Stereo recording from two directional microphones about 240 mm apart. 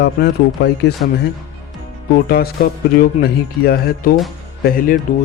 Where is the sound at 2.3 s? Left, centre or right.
Left.